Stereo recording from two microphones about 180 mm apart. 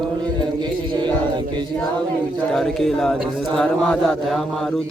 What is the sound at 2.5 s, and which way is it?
A man's voice, centre (ahead or behind).